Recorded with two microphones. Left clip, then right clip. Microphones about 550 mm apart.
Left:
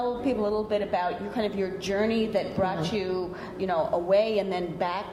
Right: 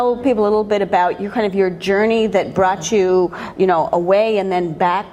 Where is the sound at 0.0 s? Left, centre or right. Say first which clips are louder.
Right 12 dB; right.